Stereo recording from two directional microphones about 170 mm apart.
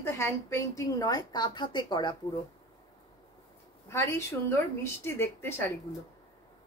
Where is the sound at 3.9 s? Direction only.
15° left (ahead or behind).